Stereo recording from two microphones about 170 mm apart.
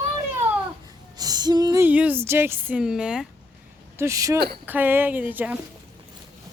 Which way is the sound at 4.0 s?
20° right (ahead or behind).